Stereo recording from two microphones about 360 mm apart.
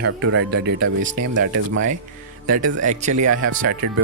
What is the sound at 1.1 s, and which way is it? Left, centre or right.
Speech, right.